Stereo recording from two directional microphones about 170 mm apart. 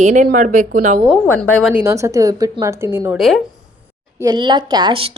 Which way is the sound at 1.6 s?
10° right (ahead or behind).